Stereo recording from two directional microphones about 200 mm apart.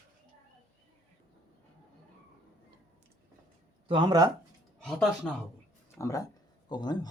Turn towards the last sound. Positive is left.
turn(degrees=20)  # may be behind; listen again after turning